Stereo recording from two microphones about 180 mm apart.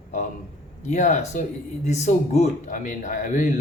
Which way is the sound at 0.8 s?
40° left (ahead or behind).